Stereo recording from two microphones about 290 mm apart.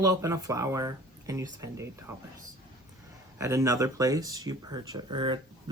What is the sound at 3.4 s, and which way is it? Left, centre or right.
Speech, centre.